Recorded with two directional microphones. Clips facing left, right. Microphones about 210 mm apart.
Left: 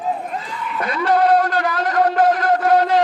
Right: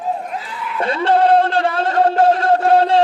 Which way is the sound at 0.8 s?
30° right (ahead or behind).